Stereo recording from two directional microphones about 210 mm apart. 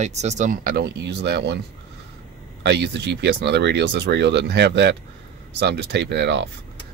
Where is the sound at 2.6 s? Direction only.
55° right (ahead or behind).